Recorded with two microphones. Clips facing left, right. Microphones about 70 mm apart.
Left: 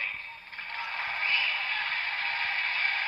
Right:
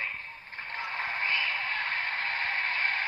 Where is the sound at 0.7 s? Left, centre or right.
Right.